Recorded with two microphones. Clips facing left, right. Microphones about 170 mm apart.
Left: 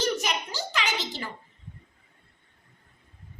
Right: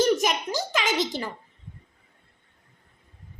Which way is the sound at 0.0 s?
50° right (ahead or behind).